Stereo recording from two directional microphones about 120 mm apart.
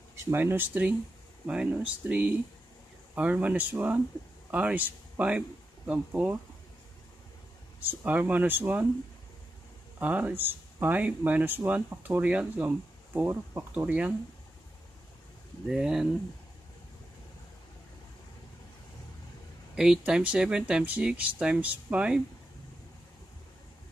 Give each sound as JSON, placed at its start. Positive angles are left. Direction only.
{"t": 0.1, "sound": "speech", "side_deg": -20}
{"t": 7.8, "sound": "speech", "side_deg": -15}
{"t": 9.9, "sound": "speech", "side_deg": -15}
{"t": 15.7, "sound": "speech", "side_deg": -5}
{"t": 19.7, "sound": "speech", "side_deg": -5}